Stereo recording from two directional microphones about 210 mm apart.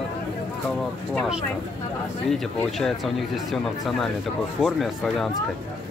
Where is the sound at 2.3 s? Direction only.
Centre (ahead or behind).